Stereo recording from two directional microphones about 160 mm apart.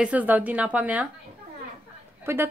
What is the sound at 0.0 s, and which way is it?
Speech, 10° right (ahead or behind).